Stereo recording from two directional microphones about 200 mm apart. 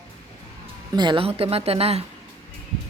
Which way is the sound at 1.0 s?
25° right (ahead or behind).